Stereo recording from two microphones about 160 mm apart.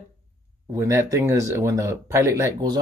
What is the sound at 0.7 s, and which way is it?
Speech, 20° right (ahead or behind).